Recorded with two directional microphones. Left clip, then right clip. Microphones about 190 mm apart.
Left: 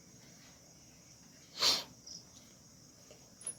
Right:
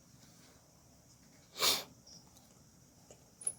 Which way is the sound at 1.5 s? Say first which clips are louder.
Left 1 dB; 40° right (ahead or behind).